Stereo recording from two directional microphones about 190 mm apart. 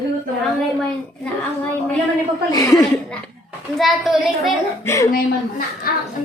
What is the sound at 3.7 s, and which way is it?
Speech, centre (ahead or behind).